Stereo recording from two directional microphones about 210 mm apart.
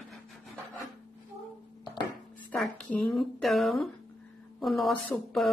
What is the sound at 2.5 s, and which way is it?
A woman's voice, 5° left (ahead or behind).